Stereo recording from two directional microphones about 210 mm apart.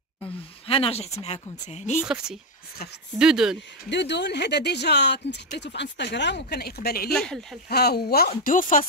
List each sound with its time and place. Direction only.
0.7 s speech: 25° left (ahead or behind)
3.2 s speech: 5° right (ahead or behind)
3.9 s speech: 55° left (ahead or behind)
7.2 s speech: centre (ahead or behind)
7.7 s speech: 50° left (ahead or behind)